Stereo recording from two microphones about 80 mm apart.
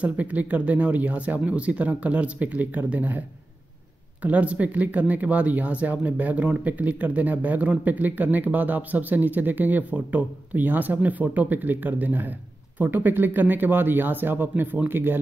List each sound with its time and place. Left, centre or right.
0.0 s speech: centre